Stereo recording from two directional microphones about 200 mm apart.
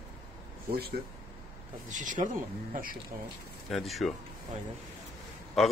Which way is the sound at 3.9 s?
Centre (ahead or behind).